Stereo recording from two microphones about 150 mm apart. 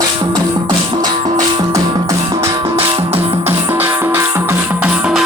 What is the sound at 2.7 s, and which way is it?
Music, 40° right (ahead or behind).